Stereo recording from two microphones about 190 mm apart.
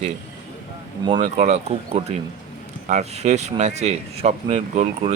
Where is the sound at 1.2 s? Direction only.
35° right (ahead or behind).